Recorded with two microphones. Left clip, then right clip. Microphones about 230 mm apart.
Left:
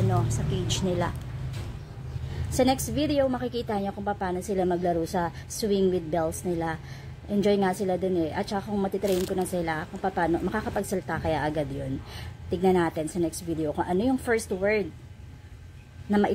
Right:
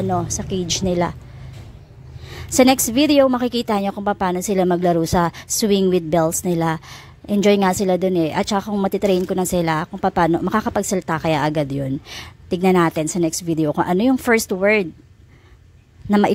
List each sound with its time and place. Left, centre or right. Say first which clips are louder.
0.1 s speech: right 8 dB; right
2.5 s a woman's voice: right 10 dB; right